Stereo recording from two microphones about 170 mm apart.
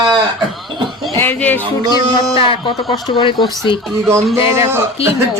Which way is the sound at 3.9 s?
15° right (ahead or behind).